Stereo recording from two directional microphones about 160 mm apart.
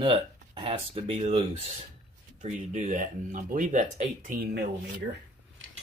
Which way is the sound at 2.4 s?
55° right (ahead or behind).